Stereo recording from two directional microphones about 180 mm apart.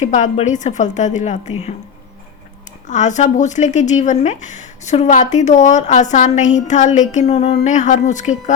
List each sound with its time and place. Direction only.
0.0 s speech: 40° left (ahead or behind)
2.8 s speech: 40° left (ahead or behind)